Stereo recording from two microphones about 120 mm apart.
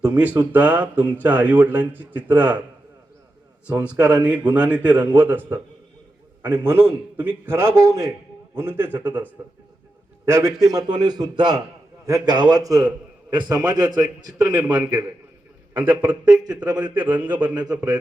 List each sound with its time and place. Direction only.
0.0 s speech: 10° right (ahead or behind)
3.8 s a man's voice: 15° right (ahead or behind)
10.2 s a man's voice: 25° right (ahead or behind)
14.3 s a man's voice: 10° right (ahead or behind)
16.2 s a man's voice: 35° right (ahead or behind)
17.0 s speech: 15° right (ahead or behind)
17.5 s a man's voice: 35° right (ahead or behind)